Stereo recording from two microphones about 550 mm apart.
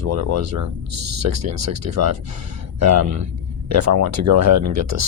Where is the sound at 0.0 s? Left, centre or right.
Right.